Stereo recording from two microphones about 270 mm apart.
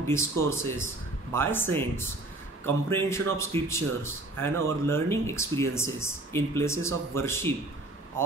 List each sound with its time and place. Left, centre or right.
0.0 s speech: centre
1.3 s speech: centre